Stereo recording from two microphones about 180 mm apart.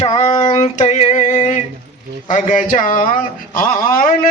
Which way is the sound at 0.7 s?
40° left (ahead or behind).